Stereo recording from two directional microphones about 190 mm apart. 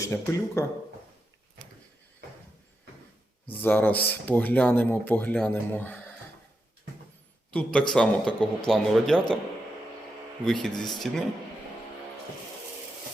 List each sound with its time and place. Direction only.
0.0 s speech: 15° left (ahead or behind)
3.4 s speech: 10° left (ahead or behind)
7.5 s a man's voice: 5° left (ahead or behind)
10.4 s a man's voice: centre (ahead or behind)